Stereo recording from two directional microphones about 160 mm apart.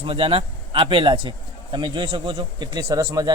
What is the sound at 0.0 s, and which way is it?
Speech, 35° right (ahead or behind).